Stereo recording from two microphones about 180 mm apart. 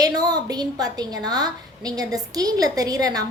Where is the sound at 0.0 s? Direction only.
20° right (ahead or behind).